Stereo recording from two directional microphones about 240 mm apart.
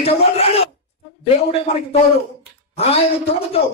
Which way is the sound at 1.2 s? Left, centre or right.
Left.